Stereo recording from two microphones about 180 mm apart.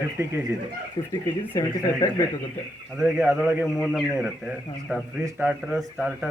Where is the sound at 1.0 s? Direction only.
25° left (ahead or behind).